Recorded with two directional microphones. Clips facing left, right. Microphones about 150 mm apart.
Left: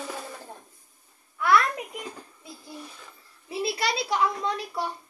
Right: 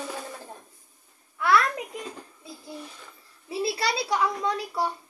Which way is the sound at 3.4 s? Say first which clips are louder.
Right 1 dB; 30° right (ahead or behind).